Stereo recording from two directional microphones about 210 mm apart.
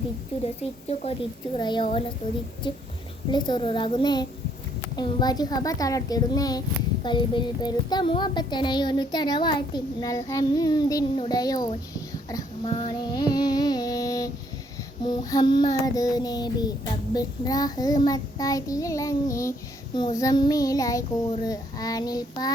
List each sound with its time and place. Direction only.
0.9 s speech: 25° left (ahead or behind)
4.9 s child singing: 20° left (ahead or behind)
7.0 s speech: 20° left (ahead or behind)
12.3 s child singing: 20° left (ahead or behind)
15.0 s speech: 20° left (ahead or behind)
17.2 s child singing: 20° left (ahead or behind)